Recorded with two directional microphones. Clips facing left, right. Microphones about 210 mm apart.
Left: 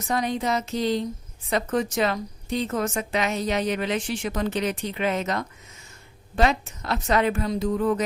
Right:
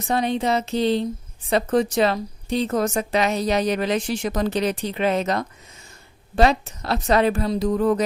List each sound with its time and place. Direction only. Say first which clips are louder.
0.1 s music: right 4 dB; 30° right (ahead or behind)
1.5 s a woman's voice: right 5 dB; 30° right (ahead or behind)